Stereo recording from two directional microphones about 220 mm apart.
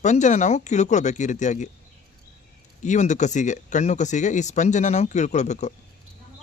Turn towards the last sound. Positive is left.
turn(degrees=30)  # may be behind; listen again after turning